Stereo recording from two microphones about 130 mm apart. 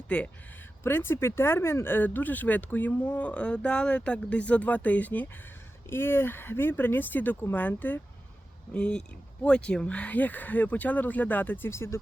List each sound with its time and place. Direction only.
0.1 s speech: 10° left (ahead or behind)